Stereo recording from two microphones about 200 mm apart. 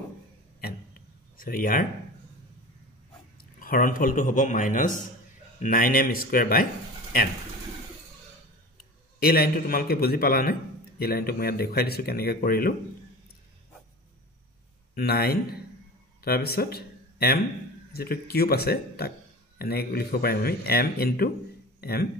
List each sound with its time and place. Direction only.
0.6 s a sound: 50° left (ahead or behind)
3.3 s a man's voice: 45° left (ahead or behind)
9.2 s a man's voice: 50° left (ahead or behind)
15.0 s a man's voice: 50° left (ahead or behind)